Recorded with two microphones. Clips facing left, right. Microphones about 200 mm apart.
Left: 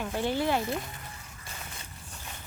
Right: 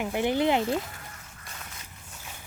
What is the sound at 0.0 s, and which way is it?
Speech, 15° right (ahead or behind).